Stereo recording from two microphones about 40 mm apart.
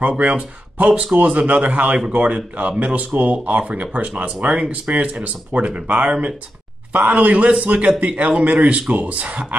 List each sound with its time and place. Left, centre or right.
0.2 s speech: right
0.8 s speech: right
1.1 s a man's voice: right